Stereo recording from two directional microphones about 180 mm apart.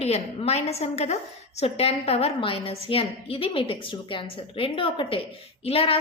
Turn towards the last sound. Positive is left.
turn(degrees=35)  # may be behind; listen again after turning